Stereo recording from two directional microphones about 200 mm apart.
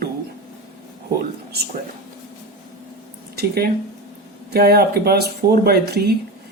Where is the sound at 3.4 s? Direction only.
50° right (ahead or behind).